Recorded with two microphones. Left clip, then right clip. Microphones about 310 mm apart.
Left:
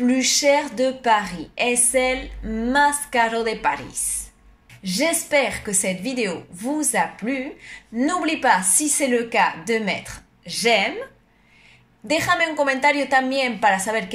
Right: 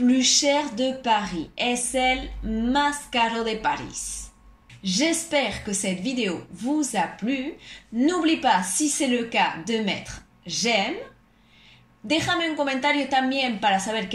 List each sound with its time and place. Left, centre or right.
0.1 s a woman's voice: left
12.1 s a woman's voice: left
13.7 s a woman's voice: left